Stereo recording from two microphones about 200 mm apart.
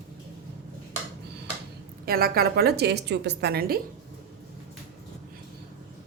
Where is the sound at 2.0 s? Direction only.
50° right (ahead or behind).